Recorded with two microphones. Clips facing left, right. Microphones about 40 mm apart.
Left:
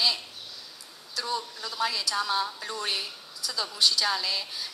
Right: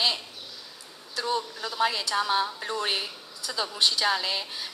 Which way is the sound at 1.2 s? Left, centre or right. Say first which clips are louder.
Right 3 dB; right.